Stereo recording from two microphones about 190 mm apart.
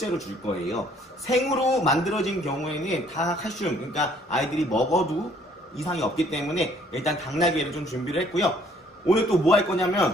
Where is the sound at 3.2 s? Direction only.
40° left (ahead or behind).